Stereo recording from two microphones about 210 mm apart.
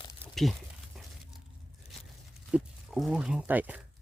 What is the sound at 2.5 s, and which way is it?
Speech, centre (ahead or behind).